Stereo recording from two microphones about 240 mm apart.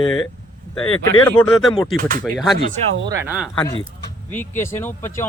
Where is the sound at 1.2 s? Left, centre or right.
Centre.